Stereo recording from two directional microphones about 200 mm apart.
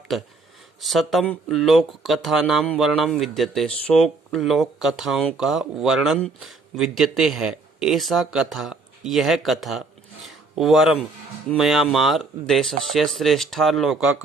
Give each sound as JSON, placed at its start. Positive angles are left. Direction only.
{"t": 0.8, "sound": "speech", "side_deg": 0}